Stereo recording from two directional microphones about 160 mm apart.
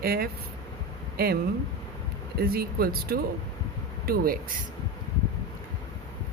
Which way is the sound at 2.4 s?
75° right (ahead or behind).